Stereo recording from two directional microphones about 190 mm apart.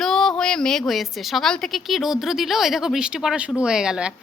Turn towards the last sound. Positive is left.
turn(degrees=-5)  # may be behind; listen again after turning